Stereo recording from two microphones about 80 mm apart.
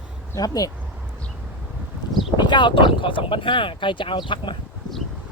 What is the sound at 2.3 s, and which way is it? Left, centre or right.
Speech, left.